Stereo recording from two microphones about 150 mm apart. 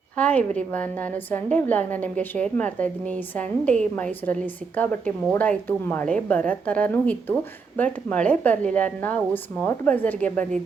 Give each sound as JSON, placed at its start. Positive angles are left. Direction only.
{"t": 0.2, "sound": "a woman's voice", "side_deg": 10}